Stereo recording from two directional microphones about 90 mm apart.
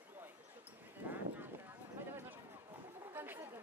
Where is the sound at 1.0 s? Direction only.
20° right (ahead or behind).